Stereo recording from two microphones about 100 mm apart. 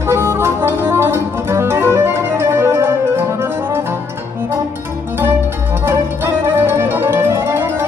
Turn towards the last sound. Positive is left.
turn(degrees=-25)  # may be behind; listen again after turning